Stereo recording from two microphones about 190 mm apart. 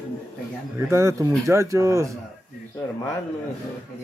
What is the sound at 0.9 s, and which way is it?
Speech, 15° right (ahead or behind).